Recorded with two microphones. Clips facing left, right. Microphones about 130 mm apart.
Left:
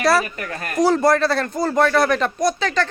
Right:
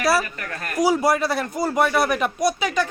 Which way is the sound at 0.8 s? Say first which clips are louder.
Left 3 dB; 10° right (ahead or behind).